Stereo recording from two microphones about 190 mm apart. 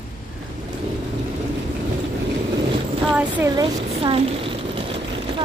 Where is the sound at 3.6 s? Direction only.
25° right (ahead or behind).